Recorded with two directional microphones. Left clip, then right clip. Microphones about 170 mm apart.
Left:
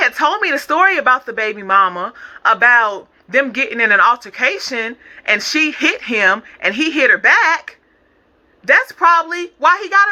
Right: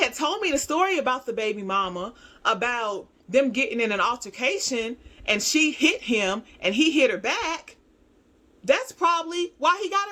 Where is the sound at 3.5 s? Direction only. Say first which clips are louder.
Left 11 dB; 45° right (ahead or behind).